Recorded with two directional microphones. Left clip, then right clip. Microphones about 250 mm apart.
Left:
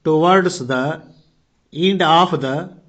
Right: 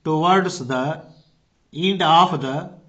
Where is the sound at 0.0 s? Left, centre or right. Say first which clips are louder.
Left 4 dB; centre.